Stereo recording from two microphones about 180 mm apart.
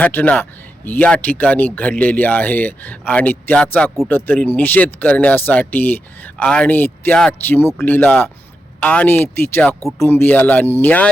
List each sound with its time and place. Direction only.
0.0 s speech: 10° left (ahead or behind)